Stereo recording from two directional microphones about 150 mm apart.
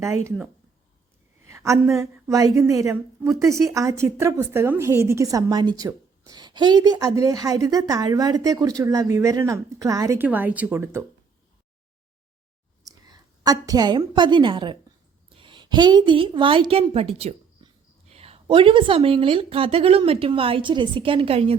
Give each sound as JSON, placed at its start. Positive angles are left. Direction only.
{"t": 0.0, "sound": "a woman's voice", "side_deg": -20}
{"t": 1.5, "sound": "a sound", "side_deg": -20}
{"t": 2.0, "sound": "a woman's voice", "side_deg": -20}
{"t": 10.2, "sound": "speech", "side_deg": -10}
{"t": 13.1, "sound": "a woman's voice", "side_deg": -25}